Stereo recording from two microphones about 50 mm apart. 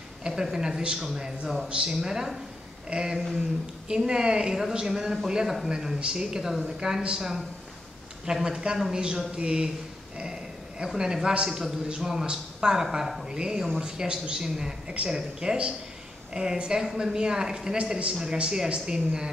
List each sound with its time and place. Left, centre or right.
0.3 s speech: centre
10.9 s a man's voice: centre